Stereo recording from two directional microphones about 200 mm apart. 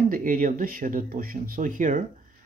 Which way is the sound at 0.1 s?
45° right (ahead or behind).